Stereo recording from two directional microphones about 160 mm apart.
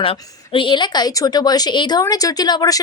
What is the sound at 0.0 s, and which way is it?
Speech, 35° left (ahead or behind).